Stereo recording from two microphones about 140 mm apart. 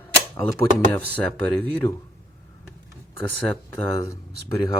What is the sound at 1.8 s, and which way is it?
Speech, 35° left (ahead or behind).